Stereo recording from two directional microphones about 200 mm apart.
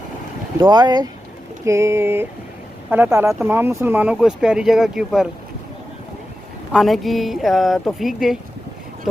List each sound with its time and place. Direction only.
0.6 s speech: 20° right (ahead or behind); by 5.3 s centre (ahead or behind)
6.7 s speech: centre (ahead or behind)